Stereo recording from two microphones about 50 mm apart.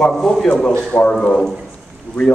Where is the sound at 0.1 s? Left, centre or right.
Centre.